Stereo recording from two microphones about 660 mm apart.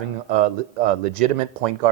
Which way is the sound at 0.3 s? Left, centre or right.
Right.